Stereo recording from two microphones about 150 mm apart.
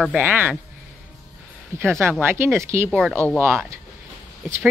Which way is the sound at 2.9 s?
5° left (ahead or behind).